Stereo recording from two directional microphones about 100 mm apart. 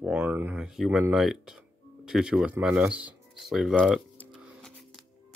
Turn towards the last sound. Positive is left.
turn(degrees=0)  # may be behind; listen again after turning